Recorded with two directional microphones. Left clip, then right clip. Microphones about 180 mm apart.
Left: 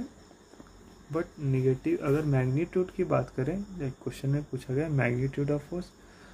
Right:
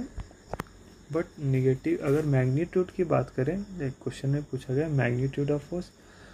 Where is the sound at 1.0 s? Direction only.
20° right (ahead or behind).